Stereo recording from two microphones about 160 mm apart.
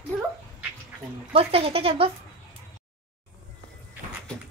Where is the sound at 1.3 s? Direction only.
35° right (ahead or behind).